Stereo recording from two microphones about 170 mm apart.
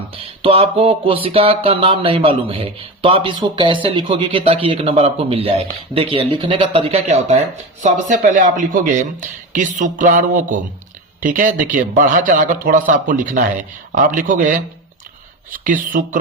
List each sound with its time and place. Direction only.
0.4 s a man's voice: 35° right (ahead or behind); by 14.6 s 50° right (ahead or behind)
15.6 s a man's voice: 50° right (ahead or behind)